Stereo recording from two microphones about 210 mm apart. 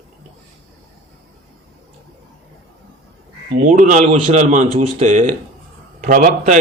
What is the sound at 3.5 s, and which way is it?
A man's voice, 35° right (ahead or behind).